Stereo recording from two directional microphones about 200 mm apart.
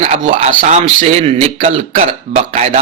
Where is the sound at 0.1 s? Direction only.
30° right (ahead or behind).